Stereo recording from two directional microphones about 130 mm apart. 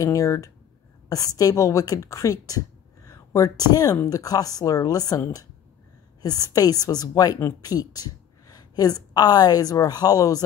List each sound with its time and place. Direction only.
0.0 s a woman's voice: 25° left (ahead or behind)
3.1 s a sound: 25° left (ahead or behind)
3.7 s a woman's voice: 30° left (ahead or behind)
6.2 s a woman's voice: 30° left (ahead or behind)